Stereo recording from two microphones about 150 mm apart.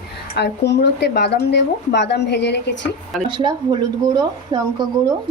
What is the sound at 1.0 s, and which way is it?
A woman's voice, 90° left.